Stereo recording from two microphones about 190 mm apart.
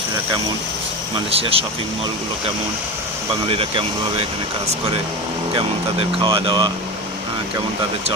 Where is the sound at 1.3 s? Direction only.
30° right (ahead or behind).